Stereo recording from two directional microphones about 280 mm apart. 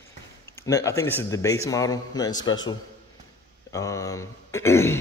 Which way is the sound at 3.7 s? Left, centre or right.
Centre.